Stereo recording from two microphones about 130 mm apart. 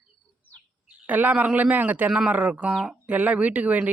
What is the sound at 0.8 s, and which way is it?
A man's voice, 10° right (ahead or behind).